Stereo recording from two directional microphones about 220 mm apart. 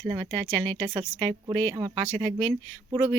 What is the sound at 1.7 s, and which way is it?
Speech, 20° right (ahead or behind).